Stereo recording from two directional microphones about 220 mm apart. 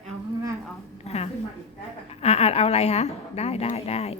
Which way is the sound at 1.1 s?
30° left (ahead or behind).